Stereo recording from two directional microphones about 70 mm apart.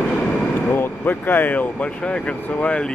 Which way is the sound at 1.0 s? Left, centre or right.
Left.